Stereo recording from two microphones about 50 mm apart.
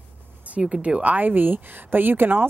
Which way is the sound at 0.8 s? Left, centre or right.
Right.